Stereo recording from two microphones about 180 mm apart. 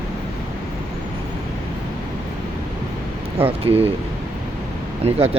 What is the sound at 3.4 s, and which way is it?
Speech, 30° right (ahead or behind).